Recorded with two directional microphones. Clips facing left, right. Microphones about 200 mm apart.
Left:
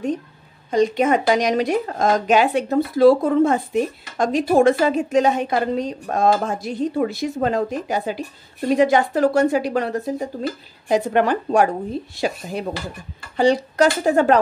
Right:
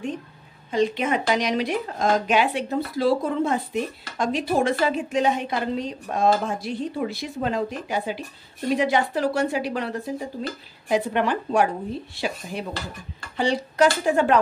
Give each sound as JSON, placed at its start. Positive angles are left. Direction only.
{"t": 0.7, "sound": "speech", "side_deg": 45}